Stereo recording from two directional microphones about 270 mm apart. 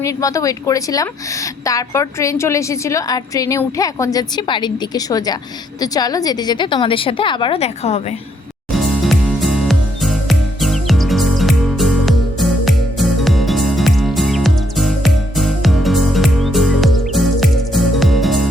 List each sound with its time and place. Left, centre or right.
0.0 s a woman's voice: centre
8.7 s music: centre